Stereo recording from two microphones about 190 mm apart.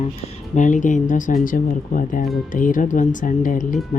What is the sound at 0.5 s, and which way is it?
Speech, 40° left (ahead or behind).